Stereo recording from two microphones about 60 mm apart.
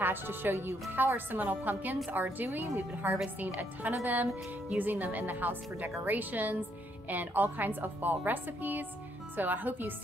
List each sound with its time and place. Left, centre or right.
0.0 s a woman's voice: right
2.7 s speech: right
3.3 s a woman's voice: right